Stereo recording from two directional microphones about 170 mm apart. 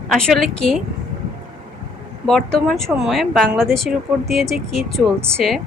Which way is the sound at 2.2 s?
5° left (ahead or behind).